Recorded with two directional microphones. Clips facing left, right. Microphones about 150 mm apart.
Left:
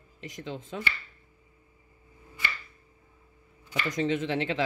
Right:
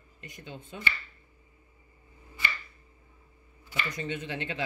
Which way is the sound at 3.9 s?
90° left.